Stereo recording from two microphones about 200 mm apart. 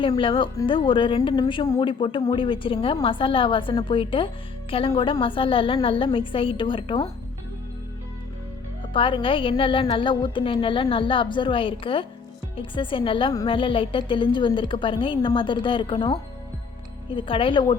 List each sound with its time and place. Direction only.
0.0 s a woman's voice: 25° left (ahead or behind)
8.9 s a woman's voice: 25° left (ahead or behind)